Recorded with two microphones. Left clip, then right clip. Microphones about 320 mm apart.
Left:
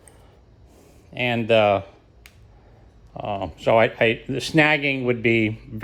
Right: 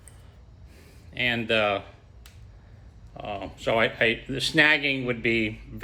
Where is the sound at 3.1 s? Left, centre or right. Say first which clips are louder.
Left 6 dB; left.